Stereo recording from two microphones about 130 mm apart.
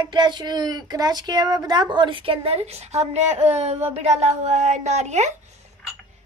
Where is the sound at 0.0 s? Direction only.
35° right (ahead or behind); by 5.3 s 60° right (ahead or behind).